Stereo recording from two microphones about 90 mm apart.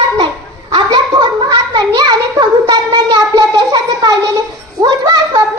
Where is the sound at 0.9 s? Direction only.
60° right (ahead or behind).